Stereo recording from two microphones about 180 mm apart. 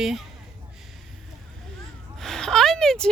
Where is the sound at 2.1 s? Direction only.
5° left (ahead or behind).